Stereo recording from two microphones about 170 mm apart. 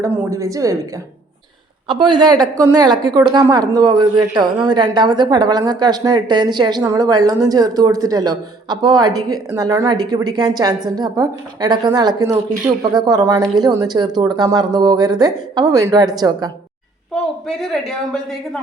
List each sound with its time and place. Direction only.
0.0 s a woman's voice: 15° right (ahead or behind)
1.9 s a woman's voice: 25° right (ahead or behind)
17.1 s a woman's voice: centre (ahead or behind)